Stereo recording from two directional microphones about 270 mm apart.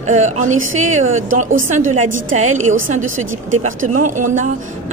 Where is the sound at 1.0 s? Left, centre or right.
Right.